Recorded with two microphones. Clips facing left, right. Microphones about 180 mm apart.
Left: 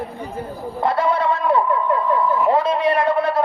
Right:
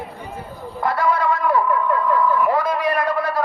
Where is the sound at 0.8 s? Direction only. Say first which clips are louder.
Left 1 dB; 25° left (ahead or behind).